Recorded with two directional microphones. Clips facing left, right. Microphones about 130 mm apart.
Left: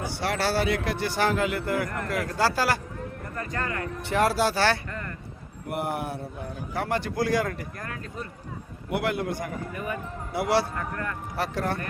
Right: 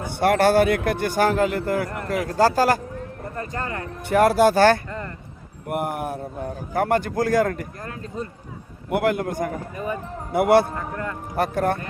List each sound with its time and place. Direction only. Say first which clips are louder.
0.1 s a man's voice: right 11 dB; 55° right (ahead or behind)
3.3 s speech: right 2 dB; 30° right (ahead or behind)
4.0 s a man's voice: right 7 dB; 50° right (ahead or behind)
4.9 s speech: right 4 dB; 25° right (ahead or behind)
5.6 s a man's voice: right 4 dB; 50° right (ahead or behind)
7.8 s speech: right 4 dB; 30° right (ahead or behind)
8.9 s a man's voice: right 5 dB; 45° right (ahead or behind)
9.7 s speech: right 4 dB; 30° right (ahead or behind)
10.3 s a man's voice: right 8 dB; 50° right (ahead or behind)
10.8 s speech: right 3 dB; 20° right (ahead or behind)
11.3 s a man's voice: right 7 dB; 50° right (ahead or behind)